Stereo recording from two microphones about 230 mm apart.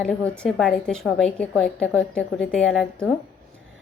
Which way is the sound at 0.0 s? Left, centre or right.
Centre.